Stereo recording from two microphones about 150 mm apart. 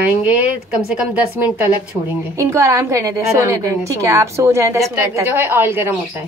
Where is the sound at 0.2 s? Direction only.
10° right (ahead or behind).